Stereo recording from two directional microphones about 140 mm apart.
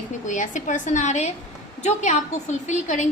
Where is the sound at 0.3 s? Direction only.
60° left (ahead or behind).